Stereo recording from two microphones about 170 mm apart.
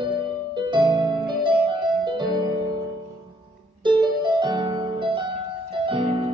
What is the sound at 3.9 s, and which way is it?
Music, 25° right (ahead or behind).